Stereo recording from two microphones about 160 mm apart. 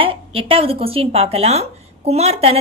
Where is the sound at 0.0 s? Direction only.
35° right (ahead or behind).